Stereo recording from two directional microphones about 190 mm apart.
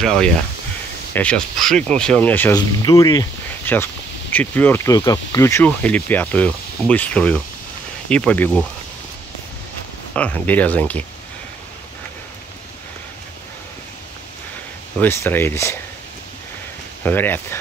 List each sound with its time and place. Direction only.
0.0 s speech: 5° left (ahead or behind)
10.1 s speech: 10° left (ahead or behind)
15.0 s speech: 10° left (ahead or behind)
17.0 s speech: 10° left (ahead or behind)